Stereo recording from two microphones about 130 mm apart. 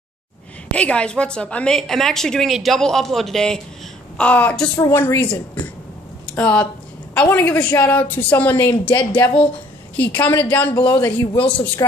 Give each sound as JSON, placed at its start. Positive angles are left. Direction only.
{"t": 0.7, "sound": "a woman's voice", "side_deg": 10}
{"t": 6.2, "sound": "a woman's voice", "side_deg": 10}